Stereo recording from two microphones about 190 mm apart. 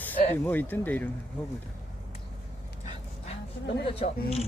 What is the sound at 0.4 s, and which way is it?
Speech, 10° left (ahead or behind).